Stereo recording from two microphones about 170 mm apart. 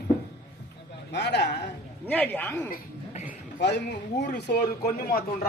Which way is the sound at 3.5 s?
65° left (ahead or behind).